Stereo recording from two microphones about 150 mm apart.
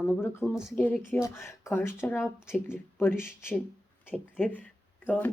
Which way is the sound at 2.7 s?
15° left (ahead or behind).